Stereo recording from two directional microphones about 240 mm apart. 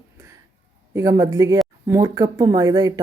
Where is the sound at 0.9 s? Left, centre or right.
Centre.